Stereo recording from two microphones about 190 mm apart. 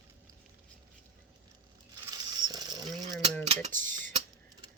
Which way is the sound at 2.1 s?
20° right (ahead or behind).